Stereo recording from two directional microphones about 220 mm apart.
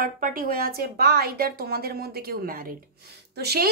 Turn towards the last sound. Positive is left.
turn(degrees=-45)  # may be behind; listen again after turning